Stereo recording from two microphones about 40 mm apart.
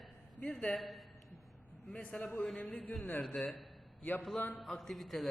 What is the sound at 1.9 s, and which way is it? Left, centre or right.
Speech, left.